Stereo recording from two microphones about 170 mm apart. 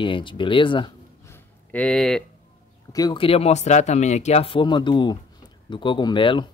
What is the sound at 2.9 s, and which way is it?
Speech, 25° left (ahead or behind).